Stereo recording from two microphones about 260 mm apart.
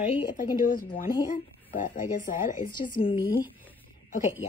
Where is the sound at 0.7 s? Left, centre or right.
Left.